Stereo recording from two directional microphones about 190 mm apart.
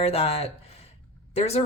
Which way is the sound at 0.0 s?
30° left (ahead or behind).